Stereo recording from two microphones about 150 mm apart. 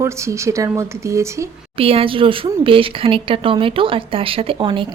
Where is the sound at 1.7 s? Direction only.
40° right (ahead or behind).